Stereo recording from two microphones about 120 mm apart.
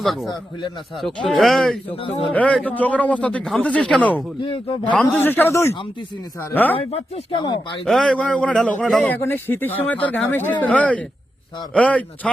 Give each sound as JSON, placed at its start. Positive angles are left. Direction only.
{"t": 0.0, "sound": "speech", "side_deg": 0}
{"t": 2.0, "sound": "speech", "side_deg": 50}
{"t": 2.3, "sound": "speech", "side_deg": 10}
{"t": 4.4, "sound": "speech", "side_deg": 45}
{"t": 4.9, "sound": "speech", "side_deg": 15}
{"t": 6.7, "sound": "speech", "side_deg": 50}
{"t": 7.9, "sound": "speech", "side_deg": 5}
{"t": 9.0, "sound": "speech", "side_deg": 20}